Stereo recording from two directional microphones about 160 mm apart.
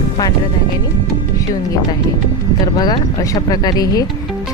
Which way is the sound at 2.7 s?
25° left (ahead or behind).